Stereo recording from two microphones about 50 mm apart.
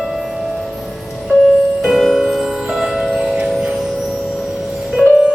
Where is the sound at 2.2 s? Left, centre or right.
Centre.